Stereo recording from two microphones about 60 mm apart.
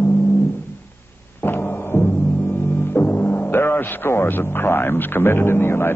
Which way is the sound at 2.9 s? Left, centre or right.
Left.